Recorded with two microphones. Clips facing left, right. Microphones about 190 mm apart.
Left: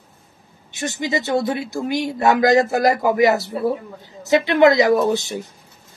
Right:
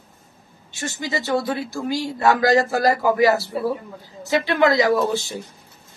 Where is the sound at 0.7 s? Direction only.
20° left (ahead or behind).